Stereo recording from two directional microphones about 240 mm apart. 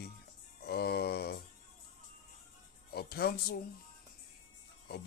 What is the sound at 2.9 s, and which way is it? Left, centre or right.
Music, left.